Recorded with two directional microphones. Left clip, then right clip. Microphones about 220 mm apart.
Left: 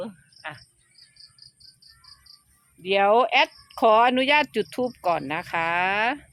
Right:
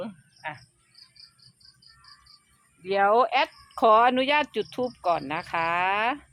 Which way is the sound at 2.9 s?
20° left (ahead or behind).